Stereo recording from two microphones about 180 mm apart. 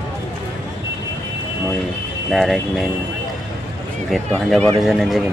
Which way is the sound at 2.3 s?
Centre (ahead or behind).